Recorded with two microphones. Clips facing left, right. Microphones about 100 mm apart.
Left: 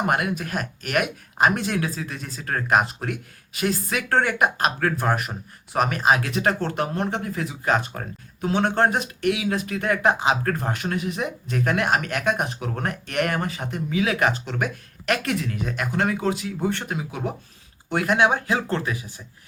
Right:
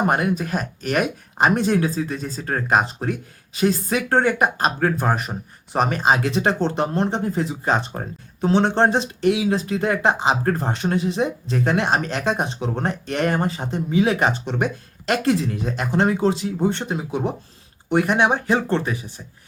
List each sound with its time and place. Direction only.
0.0 s speech: 35° right (ahead or behind)